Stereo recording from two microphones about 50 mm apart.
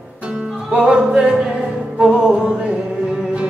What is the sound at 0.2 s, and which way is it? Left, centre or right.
Music, centre.